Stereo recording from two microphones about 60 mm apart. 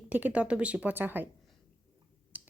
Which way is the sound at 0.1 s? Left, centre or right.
Right.